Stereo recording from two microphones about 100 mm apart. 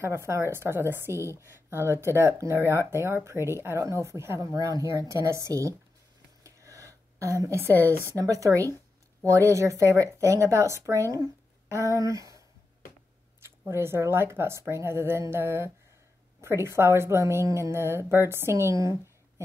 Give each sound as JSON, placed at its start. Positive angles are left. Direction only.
{"t": 0.0, "sound": "a woman's voice", "side_deg": -25}
{"t": 6.4, "sound": "a sound", "side_deg": -30}
{"t": 7.7, "sound": "speech", "side_deg": 20}
{"t": 8.2, "sound": "a woman's voice", "side_deg": -35}